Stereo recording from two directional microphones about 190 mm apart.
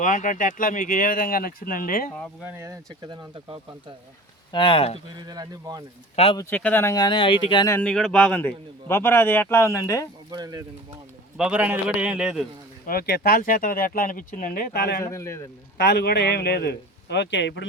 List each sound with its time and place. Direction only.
0.0 s speech: 40° left (ahead or behind)
2.4 s speech: 15° right (ahead or behind)
4.5 s speech: 25° left (ahead or behind)
5.1 s speech: 20° right (ahead or behind)
6.3 s speech: 10° left (ahead or behind)
7.7 s a man's voice: 5° left (ahead or behind)
10.3 s speech: 20° right (ahead or behind)
11.3 s a man's voice: 5° right (ahead or behind)
12.8 s speech: 55° left (ahead or behind)
15.0 s a man's voice: 15° left (ahead or behind)
15.8 s a man's voice: 60° left (ahead or behind)